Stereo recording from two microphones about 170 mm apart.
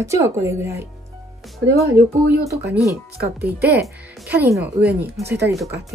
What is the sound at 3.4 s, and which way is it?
Speech, 10° right (ahead or behind).